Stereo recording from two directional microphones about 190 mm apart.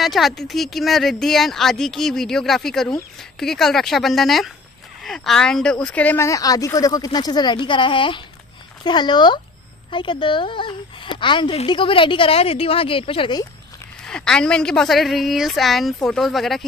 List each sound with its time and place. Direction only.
0.0 s a woman's voice: centre (ahead or behind); by 13.5 s 25° left (ahead or behind)
14.0 s speech: 5° left (ahead or behind)